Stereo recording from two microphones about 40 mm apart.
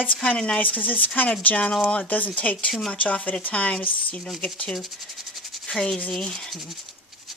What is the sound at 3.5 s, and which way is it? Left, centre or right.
Speech, left.